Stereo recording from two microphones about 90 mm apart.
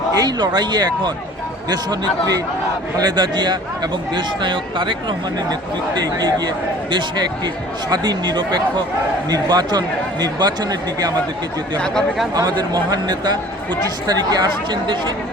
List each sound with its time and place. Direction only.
0.2 s speech: 50° right (ahead or behind)
12.3 s speech: 50° right (ahead or behind)